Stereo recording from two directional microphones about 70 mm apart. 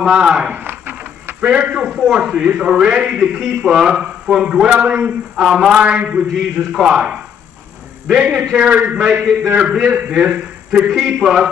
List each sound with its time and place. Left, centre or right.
0.1 s a man's voice: centre
0.6 s a sound: right
1.4 s a man's voice: centre
2.0 s a man's voice: centre
2.2 s a man's voice: centre
8.2 s a man's voice: centre